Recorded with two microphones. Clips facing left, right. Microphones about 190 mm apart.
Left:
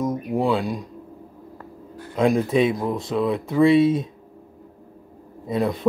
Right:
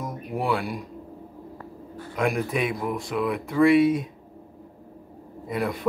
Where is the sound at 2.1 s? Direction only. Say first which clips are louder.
Left 6 dB; 25° left (ahead or behind).